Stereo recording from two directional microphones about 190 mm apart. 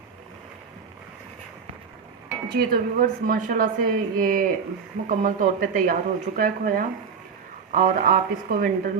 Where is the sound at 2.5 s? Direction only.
50° right (ahead or behind).